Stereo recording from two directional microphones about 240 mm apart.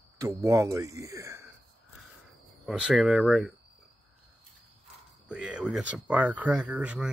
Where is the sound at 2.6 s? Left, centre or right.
Centre.